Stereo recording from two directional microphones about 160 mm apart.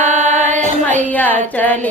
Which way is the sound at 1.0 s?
10° left (ahead or behind).